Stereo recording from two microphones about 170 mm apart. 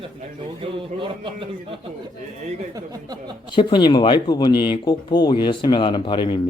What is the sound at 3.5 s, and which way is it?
Speech, 25° left (ahead or behind).